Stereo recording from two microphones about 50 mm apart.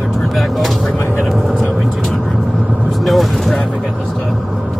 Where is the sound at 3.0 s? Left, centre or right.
Centre.